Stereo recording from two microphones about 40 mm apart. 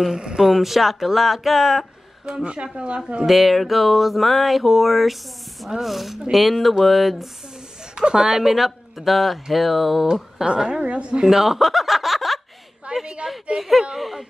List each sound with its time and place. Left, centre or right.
0.1 s speech: right
0.4 s speech: centre
2.2 s speech: right
3.3 s speech: centre
7.9 s speech: right; by 10.0 s centre
10.4 s speech: centre
11.2 s speech: centre
12.9 s a woman's voice: centre
13.6 s speech: centre